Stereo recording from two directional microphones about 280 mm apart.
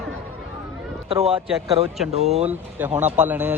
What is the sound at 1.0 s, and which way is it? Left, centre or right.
Speech, centre.